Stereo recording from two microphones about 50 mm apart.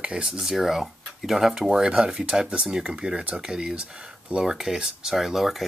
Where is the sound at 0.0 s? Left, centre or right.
Centre.